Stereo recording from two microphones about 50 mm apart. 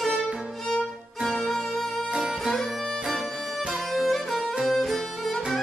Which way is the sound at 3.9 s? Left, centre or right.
Centre.